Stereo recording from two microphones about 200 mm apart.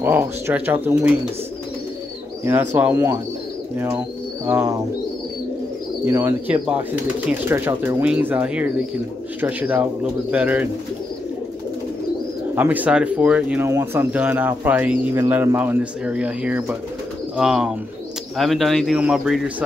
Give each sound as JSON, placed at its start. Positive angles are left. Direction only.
{"t": 0.0, "sound": "speech", "side_deg": -10}
{"t": 2.4, "sound": "speech", "side_deg": -10}
{"t": 6.0, "sound": "speech", "side_deg": -10}
{"t": 12.5, "sound": "speech", "side_deg": -10}